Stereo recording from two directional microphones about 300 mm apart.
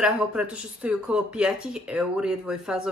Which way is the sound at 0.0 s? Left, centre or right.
Centre.